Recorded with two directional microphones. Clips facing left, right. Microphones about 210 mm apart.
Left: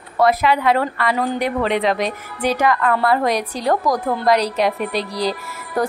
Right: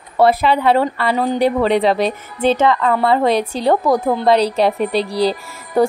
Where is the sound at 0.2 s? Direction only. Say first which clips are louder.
Right 3 dB; 30° right (ahead or behind).